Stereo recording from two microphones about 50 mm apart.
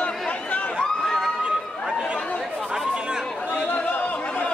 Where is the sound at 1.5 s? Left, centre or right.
Centre.